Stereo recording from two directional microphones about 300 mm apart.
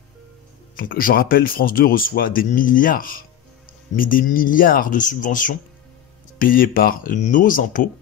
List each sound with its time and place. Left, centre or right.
0.7 s speech: left